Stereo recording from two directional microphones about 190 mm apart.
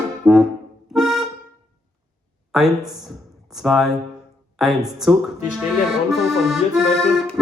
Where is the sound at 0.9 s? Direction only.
Centre (ahead or behind).